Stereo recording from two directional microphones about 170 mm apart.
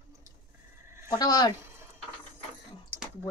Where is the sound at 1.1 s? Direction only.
20° left (ahead or behind).